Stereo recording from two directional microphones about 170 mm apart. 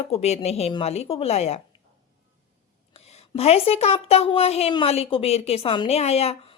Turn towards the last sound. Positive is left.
turn(degrees=35)  # may be behind; listen again after turning